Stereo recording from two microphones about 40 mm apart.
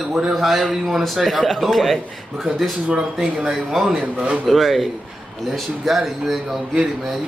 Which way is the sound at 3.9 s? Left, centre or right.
Right.